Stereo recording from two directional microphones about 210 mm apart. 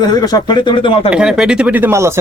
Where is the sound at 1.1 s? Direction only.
5° right (ahead or behind).